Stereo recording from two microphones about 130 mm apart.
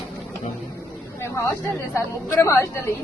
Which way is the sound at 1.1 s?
20° left (ahead or behind).